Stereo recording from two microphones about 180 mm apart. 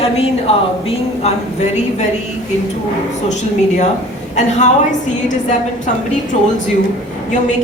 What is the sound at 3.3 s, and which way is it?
A woman's voice, 40° left (ahead or behind).